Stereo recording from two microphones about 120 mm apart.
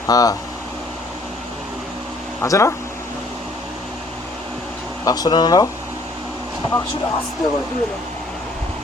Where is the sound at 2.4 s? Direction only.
25° left (ahead or behind).